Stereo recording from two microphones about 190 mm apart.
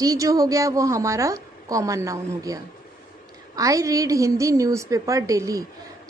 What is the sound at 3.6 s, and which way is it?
A woman's voice, 15° right (ahead or behind).